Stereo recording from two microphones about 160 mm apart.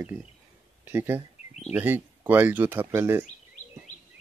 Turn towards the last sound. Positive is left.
turn(degrees=-15)  # may be behind; listen again after turning